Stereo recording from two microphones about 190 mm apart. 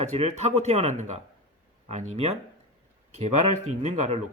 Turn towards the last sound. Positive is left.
turn(degrees=-35)  # may be behind; listen again after turning